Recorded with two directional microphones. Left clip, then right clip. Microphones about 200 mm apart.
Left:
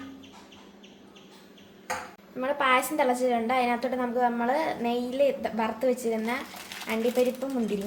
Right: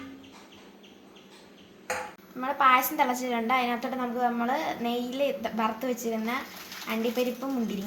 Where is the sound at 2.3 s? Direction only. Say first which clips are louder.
Right 2 dB; 25° left (ahead or behind).